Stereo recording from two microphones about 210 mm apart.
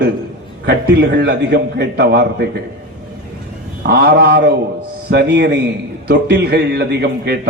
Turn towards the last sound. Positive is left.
turn(degrees=-50)  # may be behind; listen again after turning